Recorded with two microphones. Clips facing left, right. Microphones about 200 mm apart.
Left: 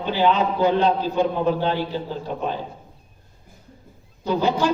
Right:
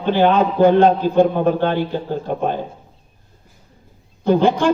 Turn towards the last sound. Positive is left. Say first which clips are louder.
# right 6 dB
turn(degrees=-50)  # may be behind; listen again after turning